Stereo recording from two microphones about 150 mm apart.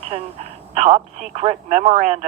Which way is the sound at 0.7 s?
50° right (ahead or behind).